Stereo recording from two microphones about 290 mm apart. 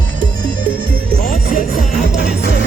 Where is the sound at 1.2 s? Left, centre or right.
Left.